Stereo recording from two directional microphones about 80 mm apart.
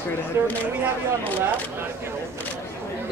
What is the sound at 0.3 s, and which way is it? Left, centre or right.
Speech, right.